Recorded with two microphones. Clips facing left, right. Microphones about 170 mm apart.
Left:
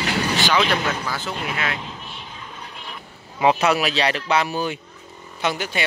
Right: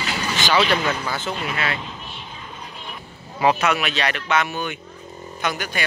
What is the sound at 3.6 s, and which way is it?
A man's voice, 35° left (ahead or behind).